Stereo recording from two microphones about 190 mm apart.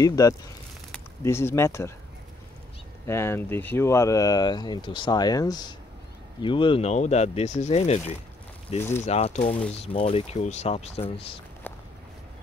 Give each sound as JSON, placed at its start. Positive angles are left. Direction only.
{"t": 0.0, "sound": "speech", "side_deg": 20}
{"t": 3.1, "sound": "speech", "side_deg": 15}